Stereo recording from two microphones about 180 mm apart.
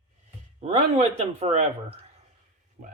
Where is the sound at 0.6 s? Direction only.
40° right (ahead or behind).